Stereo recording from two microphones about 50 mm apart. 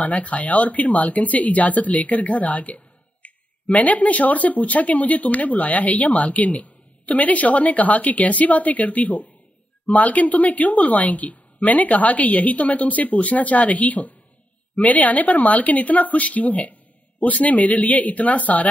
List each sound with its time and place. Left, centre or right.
0.0 s speech: left